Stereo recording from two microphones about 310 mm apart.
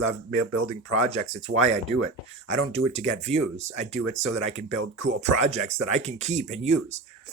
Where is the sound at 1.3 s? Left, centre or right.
Right.